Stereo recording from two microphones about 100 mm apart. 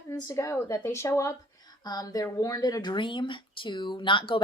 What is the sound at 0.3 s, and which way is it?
A woman's voice, 30° left (ahead or behind).